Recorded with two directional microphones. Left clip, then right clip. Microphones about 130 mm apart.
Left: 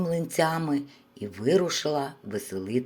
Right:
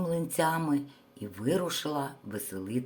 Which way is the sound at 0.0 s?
15° left (ahead or behind).